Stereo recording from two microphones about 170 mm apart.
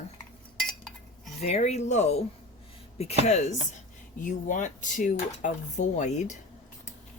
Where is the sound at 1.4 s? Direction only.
40° left (ahead or behind).